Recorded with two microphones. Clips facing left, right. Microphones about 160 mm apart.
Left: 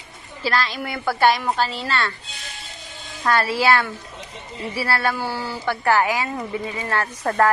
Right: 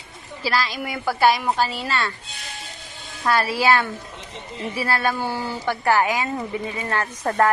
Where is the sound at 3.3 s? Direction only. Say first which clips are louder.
Even; 10° right (ahead or behind).